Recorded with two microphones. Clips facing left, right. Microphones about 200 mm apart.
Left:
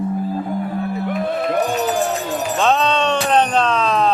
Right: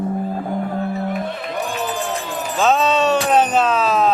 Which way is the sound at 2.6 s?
5° right (ahead or behind).